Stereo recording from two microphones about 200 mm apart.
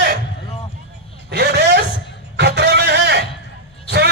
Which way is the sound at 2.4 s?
55° right (ahead or behind).